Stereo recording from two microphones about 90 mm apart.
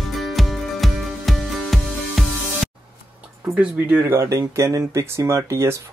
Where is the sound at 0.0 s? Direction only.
Centre (ahead or behind).